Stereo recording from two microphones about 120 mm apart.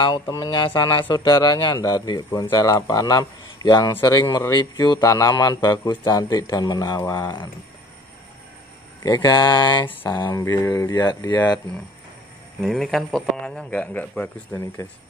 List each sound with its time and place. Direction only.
0.0 s a man's voice: 35° left (ahead or behind)
9.0 s a man's voice: 35° left (ahead or behind)
10.6 s a man's voice: 25° left (ahead or behind)
12.6 s a man's voice: centre (ahead or behind)